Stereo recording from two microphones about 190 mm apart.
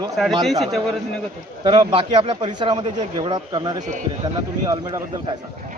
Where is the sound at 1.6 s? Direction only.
25° right (ahead or behind).